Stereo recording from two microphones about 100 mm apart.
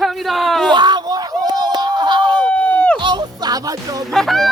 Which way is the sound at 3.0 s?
45° right (ahead or behind).